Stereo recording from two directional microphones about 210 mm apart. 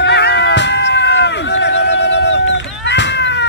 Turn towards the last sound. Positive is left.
turn(degrees=55)  # may be behind; listen again after turning